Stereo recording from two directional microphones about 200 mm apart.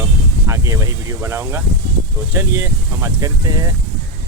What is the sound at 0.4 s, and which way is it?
Speech, 15° right (ahead or behind).